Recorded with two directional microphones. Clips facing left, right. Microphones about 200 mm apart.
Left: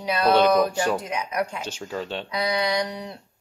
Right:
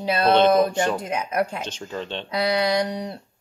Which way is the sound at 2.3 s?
30° right (ahead or behind).